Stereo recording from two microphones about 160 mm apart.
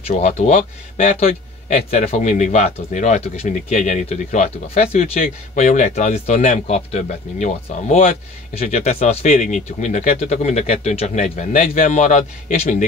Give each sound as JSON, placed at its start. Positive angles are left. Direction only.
{"t": 0.1, "sound": "speech", "side_deg": 45}